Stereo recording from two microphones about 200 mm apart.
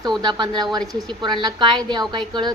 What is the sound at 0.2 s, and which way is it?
A woman's voice, 20° right (ahead or behind).